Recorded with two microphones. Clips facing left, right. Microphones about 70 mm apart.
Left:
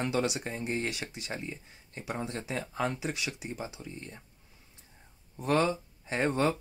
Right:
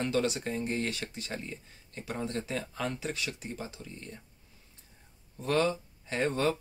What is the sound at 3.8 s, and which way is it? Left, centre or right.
Speech, left.